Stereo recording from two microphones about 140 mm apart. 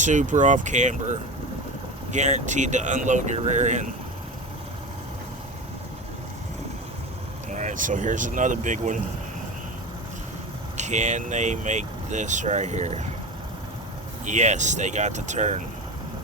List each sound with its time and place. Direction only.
0.0 s speech: 60° right (ahead or behind)
7.5 s speech: 60° right (ahead or behind)
10.8 s speech: 55° right (ahead or behind)
14.3 s speech: 60° right (ahead or behind)